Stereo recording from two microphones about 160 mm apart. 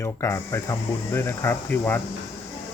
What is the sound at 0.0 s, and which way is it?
Speech, 15° left (ahead or behind).